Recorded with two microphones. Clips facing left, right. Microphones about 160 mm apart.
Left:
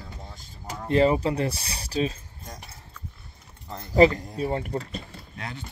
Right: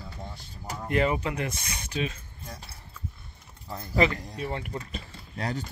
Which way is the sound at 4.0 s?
35° left (ahead or behind).